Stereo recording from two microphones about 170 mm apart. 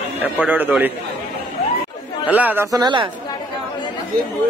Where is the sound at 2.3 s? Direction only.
10° right (ahead or behind).